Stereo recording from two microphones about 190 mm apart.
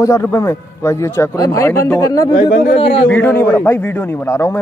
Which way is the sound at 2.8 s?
30° left (ahead or behind).